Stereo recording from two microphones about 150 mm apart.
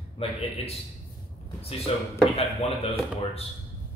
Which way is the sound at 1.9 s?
40° left (ahead or behind).